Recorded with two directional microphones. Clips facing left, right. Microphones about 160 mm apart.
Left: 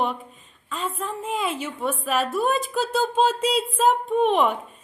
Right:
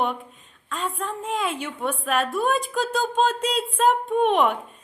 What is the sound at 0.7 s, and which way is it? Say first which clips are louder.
A woman's voice: even; centre (ahead or behind).